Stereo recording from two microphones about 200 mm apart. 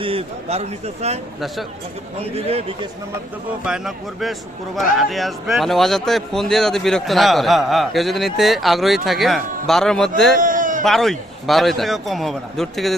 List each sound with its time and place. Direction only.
0.0 s speech: 30° right (ahead or behind)
2.3 s speech: 30° right (ahead or behind)
3.6 s speech: 5° right (ahead or behind)
10.4 s a sound: 40° right (ahead or behind)
10.8 s speech: centre (ahead or behind)